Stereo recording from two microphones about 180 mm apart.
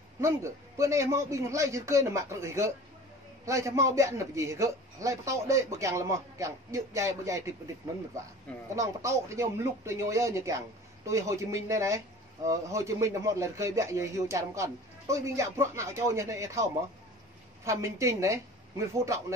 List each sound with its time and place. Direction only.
0.2 s a man's voice: 15° right (ahead or behind)
8.7 s a man's voice: 15° right (ahead or behind)